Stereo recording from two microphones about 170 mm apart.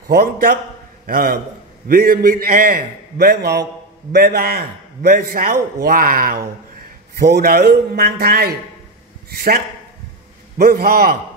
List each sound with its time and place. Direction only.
0.1 s a man's voice: 65° right (ahead or behind)
7.2 s a man's voice: 75° right (ahead or behind)
10.6 s a man's voice: 65° right (ahead or behind)